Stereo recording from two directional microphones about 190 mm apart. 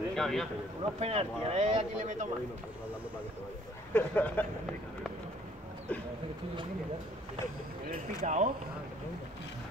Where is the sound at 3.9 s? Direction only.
10° left (ahead or behind).